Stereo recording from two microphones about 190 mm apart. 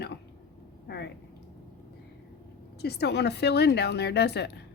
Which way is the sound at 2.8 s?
60° left (ahead or behind).